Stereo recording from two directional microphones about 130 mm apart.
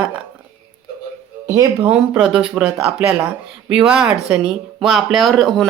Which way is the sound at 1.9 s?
5° right (ahead or behind).